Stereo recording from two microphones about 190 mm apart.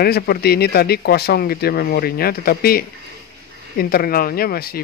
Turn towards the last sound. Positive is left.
turn(degrees=50)  # may be behind; listen again after turning